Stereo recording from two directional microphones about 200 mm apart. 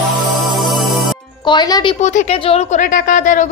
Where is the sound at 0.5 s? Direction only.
Centre (ahead or behind).